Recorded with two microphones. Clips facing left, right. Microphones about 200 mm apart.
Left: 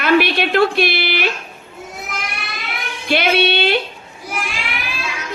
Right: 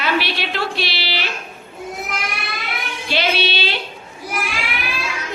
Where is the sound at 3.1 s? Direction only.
55° left (ahead or behind).